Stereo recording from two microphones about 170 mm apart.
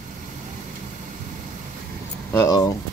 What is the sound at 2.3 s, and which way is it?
Speech, 20° left (ahead or behind).